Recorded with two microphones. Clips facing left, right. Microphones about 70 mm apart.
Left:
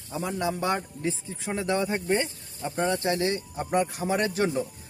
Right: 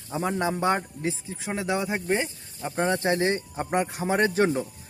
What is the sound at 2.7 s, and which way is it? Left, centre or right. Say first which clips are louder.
Speech: right 2 dB; right.